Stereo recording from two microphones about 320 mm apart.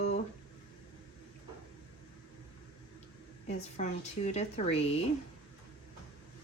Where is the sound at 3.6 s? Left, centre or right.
Left.